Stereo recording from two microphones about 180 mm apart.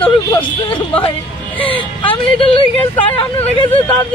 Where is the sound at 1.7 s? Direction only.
30° left (ahead or behind).